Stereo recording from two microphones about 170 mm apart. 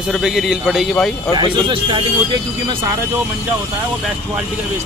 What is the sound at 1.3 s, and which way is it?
Speech, 25° right (ahead or behind).